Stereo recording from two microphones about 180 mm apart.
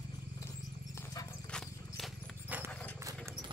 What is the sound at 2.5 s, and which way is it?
Horse, 10° right (ahead or behind).